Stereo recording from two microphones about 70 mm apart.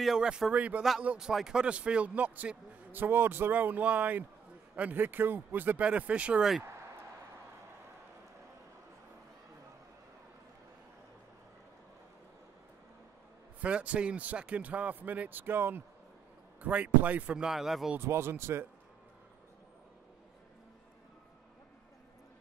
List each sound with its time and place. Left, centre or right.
0.0 s speech: centre
13.6 s speech: centre
17.5 s speech: centre
17.9 s speech: right